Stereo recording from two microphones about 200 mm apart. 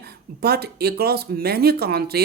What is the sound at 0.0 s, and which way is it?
Speech, 50° right (ahead or behind).